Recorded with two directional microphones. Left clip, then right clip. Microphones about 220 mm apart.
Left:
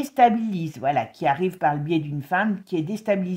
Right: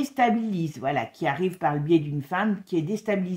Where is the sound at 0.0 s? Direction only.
40° left (ahead or behind).